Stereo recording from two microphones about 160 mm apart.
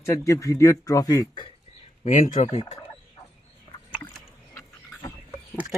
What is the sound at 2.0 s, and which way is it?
Speech, 45° left (ahead or behind).